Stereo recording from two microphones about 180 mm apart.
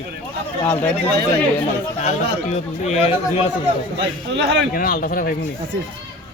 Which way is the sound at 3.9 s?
75° right (ahead or behind).